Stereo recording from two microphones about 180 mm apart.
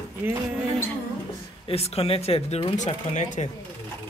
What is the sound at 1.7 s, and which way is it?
Speech, 35° left (ahead or behind).